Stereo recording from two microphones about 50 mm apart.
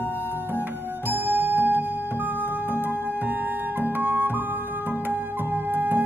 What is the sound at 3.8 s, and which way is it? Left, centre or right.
Music, right.